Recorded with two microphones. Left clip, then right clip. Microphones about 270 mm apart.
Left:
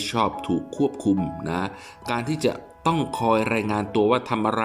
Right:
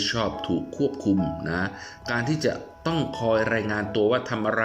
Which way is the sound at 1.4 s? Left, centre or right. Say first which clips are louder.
Even; centre.